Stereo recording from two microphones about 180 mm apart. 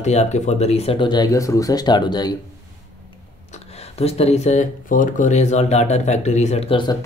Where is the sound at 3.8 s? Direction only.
35° left (ahead or behind).